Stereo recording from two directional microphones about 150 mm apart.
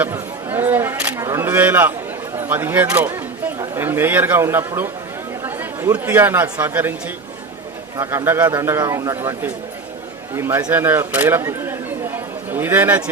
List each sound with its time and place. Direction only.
0.0 s single-lens reflex camera: 15° right (ahead or behind)
2.4 s speech: 15° right (ahead or behind)
2.9 s a sound: 10° right (ahead or behind)
3.6 s speech: 15° right (ahead or behind)
7.9 s a man's voice: 20° right (ahead or behind)